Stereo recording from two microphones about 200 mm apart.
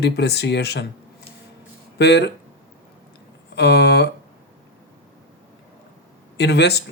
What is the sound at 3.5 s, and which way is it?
Speech, 60° left (ahead or behind).